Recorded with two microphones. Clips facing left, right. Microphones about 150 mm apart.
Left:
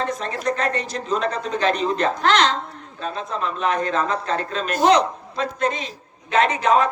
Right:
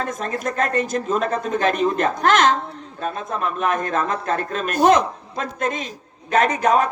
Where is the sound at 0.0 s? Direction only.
50° right (ahead or behind).